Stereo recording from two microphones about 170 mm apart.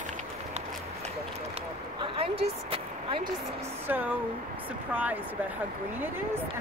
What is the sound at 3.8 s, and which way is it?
Speech, 10° right (ahead or behind).